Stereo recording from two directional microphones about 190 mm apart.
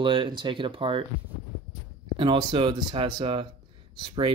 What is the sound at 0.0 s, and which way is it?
Speech, 25° right (ahead or behind).